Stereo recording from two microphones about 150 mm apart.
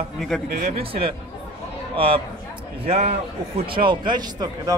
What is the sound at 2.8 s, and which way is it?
Speech, 45° right (ahead or behind).